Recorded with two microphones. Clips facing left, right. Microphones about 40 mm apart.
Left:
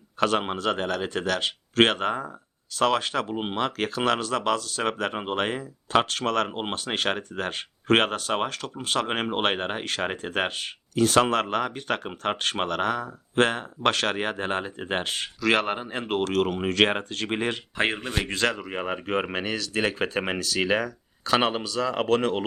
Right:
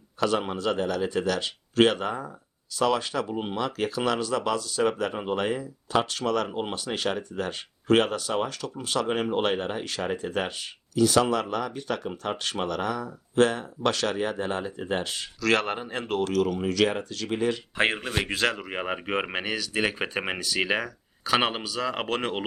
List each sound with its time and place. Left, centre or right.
0.2 s speech: left
3.2 s speech: left
3.5 s speech: left
15.4 s speech: left
16.1 s speech: left
17.7 s speech: centre